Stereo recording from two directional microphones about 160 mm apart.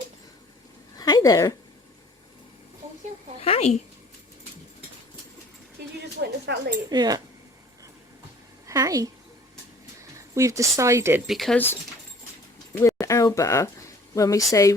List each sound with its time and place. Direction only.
0.9 s a sound: 25° left (ahead or behind)
3.4 s speech: 40° left (ahead or behind)
6.0 s speech: 90° right
6.9 s speech: 25° right (ahead or behind)
8.6 s a woman's voice: 20° right (ahead or behind)
11.3 s speech: centre (ahead or behind)
13.0 s a sound: 20° left (ahead or behind)
14.2 s speech: 20° left (ahead or behind)